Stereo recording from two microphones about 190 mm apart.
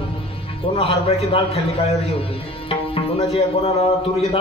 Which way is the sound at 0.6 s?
30° left (ahead or behind).